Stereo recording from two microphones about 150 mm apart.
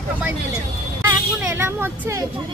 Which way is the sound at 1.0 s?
15° right (ahead or behind).